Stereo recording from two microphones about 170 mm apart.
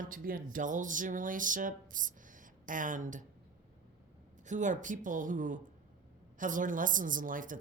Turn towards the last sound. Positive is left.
turn(degrees=-50)  # may be behind; listen again after turning